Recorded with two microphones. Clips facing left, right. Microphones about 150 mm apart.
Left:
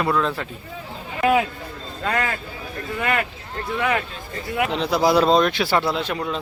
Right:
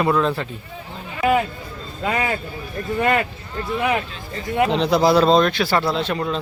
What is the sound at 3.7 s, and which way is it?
Speech, 10° right (ahead or behind).